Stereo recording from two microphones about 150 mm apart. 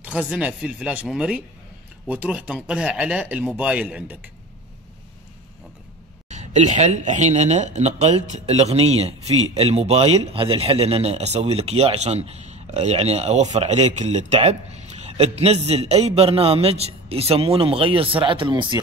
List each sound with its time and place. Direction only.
0.0 s speech: 10° right (ahead or behind)
6.2 s speech: 50° right (ahead or behind); by 18.8 s 30° right (ahead or behind)